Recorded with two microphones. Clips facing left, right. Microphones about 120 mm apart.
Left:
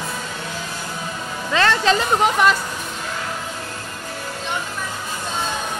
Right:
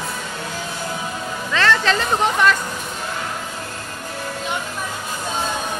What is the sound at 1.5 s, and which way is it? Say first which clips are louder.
Speech: left 1 dB; 20° left (ahead or behind).